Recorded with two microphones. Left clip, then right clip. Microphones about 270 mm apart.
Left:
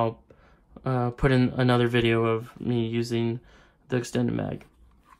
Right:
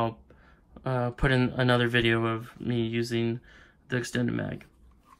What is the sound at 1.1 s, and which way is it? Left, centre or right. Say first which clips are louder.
Speech: left 3 dB; left.